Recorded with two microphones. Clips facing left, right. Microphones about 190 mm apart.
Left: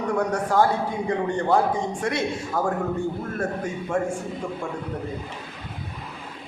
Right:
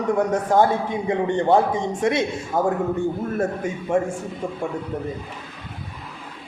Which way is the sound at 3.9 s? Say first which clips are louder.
Right 4 dB; 20° right (ahead or behind).